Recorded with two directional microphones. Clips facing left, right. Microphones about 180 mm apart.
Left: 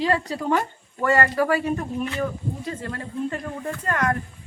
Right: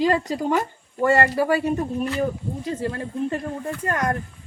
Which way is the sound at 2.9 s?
25° right (ahead or behind).